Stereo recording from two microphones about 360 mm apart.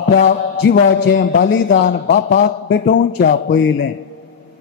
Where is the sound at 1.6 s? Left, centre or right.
Left.